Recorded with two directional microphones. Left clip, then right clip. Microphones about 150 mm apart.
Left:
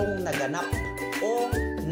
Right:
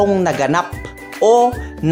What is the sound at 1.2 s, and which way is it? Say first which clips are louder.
Speech: right 17 dB; 40° right (ahead or behind).